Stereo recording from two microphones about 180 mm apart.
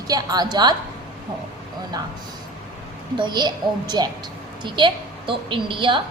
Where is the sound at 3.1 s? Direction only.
25° right (ahead or behind).